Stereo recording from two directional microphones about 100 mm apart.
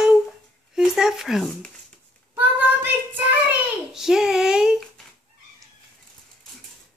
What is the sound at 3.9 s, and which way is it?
Child singing, 5° right (ahead or behind).